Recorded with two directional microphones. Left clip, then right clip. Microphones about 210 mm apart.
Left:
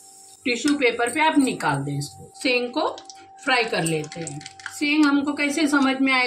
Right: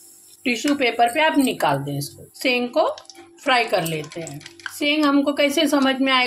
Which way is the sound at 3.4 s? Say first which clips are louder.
Right 3 dB; 45° right (ahead or behind).